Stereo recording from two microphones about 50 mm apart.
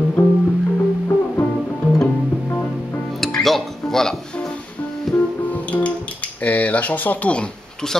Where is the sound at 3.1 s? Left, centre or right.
Centre.